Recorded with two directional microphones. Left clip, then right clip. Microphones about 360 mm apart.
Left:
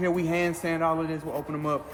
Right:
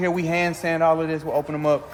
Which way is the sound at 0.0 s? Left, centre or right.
Right.